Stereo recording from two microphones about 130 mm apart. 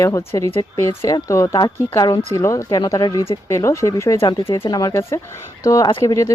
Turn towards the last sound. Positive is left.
turn(degrees=25)  # may be behind; listen again after turning